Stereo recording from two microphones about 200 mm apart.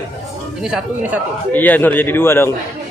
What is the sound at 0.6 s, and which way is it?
Speech, 5° right (ahead or behind).